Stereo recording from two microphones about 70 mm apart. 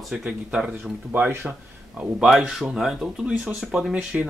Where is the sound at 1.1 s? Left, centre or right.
Right.